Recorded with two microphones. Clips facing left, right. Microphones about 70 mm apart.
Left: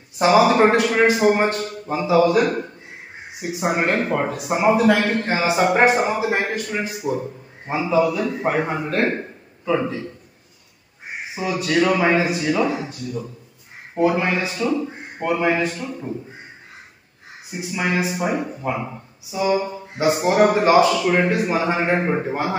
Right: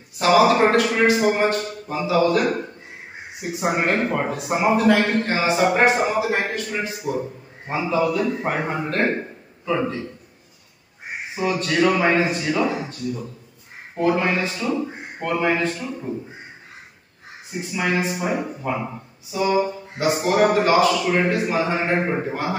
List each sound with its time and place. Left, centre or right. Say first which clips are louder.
0.2 s a man's voice: left 1 dB; centre
3.5 s a man's voice: left 1 dB; centre
5.2 s a man's voice: left 1 dB; centre
7.0 s a man's voice: left 1 dB; centre
11.3 s a man's voice: left 1 dB; centre
14.7 s speech: left 1 dB; centre
15.2 s a man's voice: left 1 dB; centre
17.5 s a man's voice: even; centre
20.0 s a man's voice: left 2 dB; centre
22.3 s a man's voice: left 2 dB; left